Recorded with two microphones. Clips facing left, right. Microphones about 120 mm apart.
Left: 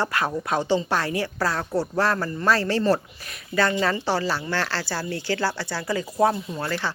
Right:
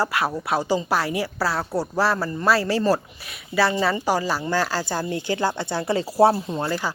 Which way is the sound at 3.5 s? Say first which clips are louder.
Right 2 dB; 25° right (ahead or behind).